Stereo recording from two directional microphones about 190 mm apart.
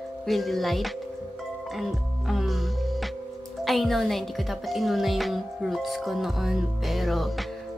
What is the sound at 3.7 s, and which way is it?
A woman's voice, centre (ahead or behind).